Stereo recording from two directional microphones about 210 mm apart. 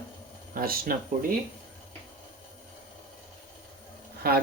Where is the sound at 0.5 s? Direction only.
45° right (ahead or behind).